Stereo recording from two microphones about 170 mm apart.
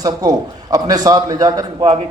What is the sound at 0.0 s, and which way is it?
A man's voice, 20° right (ahead or behind).